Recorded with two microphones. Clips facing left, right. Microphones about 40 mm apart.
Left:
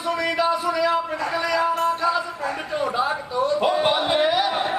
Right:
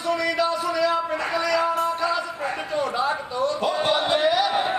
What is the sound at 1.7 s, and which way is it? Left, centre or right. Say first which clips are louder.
Music: left 2 dB; centre.